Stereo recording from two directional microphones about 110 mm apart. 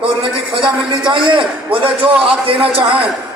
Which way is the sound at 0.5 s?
50° right (ahead or behind).